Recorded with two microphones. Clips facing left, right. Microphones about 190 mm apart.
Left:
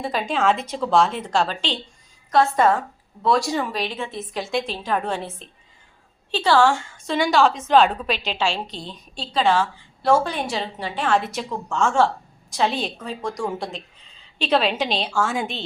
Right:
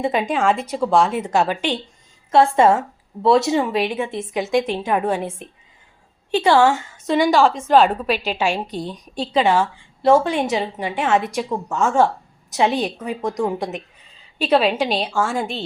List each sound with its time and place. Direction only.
0.0 s a woman's voice: 20° right (ahead or behind)
2.3 s a woman's voice: 30° right (ahead or behind)
3.8 s a woman's voice: 10° right (ahead or behind)
4.9 s a woman's voice: 10° right (ahead or behind)
7.1 s a woman's voice: 5° right (ahead or behind)
11.7 s a woman's voice: 5° right (ahead or behind)
12.5 s a woman's voice: 15° right (ahead or behind); by 15.6 s centre (ahead or behind)